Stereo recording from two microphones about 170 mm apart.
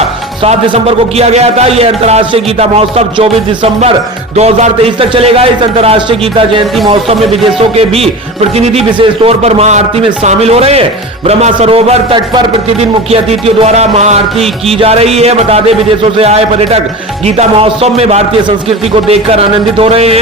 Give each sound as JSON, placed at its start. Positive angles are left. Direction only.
{"t": 0.4, "sound": "a man's voice", "side_deg": -30}